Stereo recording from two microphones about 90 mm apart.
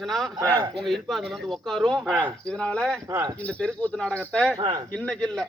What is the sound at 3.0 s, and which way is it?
Speech, 40° right (ahead or behind).